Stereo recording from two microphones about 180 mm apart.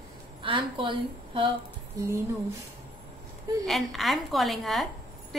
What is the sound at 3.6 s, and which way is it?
A woman's voice, centre (ahead or behind).